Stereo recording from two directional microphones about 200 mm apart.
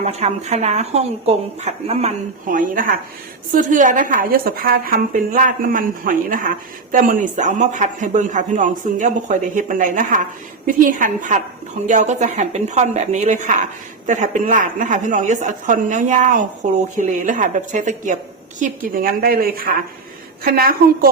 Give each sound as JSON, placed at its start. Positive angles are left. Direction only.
{"t": 0.0, "sound": "a woman's voice", "side_deg": -35}